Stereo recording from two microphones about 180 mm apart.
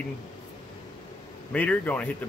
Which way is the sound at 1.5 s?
10° left (ahead or behind).